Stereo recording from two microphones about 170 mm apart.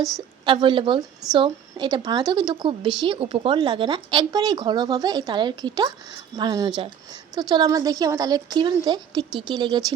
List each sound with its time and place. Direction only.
0.4 s speech: 30° right (ahead or behind)